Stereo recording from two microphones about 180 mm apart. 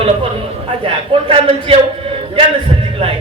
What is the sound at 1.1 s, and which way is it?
Speech, 30° right (ahead or behind).